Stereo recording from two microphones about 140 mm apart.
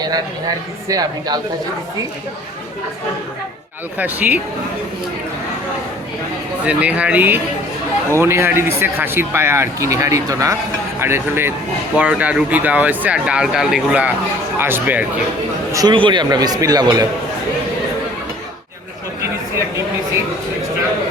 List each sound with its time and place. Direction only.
0.0 s speech: 25° right (ahead or behind)
3.9 s speech: 15° right (ahead or behind)
6.7 s speech: 10° right (ahead or behind)
15.7 s speech: 30° right (ahead or behind)